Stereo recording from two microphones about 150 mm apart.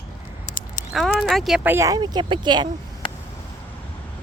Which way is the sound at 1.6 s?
15° right (ahead or behind).